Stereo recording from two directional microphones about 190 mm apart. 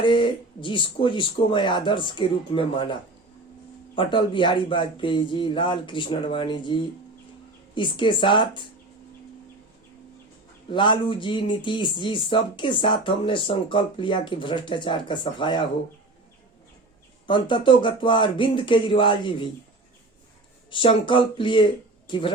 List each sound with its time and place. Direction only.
0.0 s speech: 25° left (ahead or behind)
3.9 s speech: 25° left (ahead or behind)
10.7 s speech: 25° left (ahead or behind)
17.2 s speech: 25° left (ahead or behind)
20.7 s speech: 25° left (ahead or behind)